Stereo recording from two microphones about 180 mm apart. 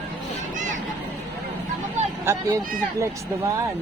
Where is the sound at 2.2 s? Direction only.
15° right (ahead or behind).